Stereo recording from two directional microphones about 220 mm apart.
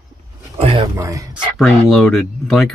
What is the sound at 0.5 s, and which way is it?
Speech, 25° right (ahead or behind).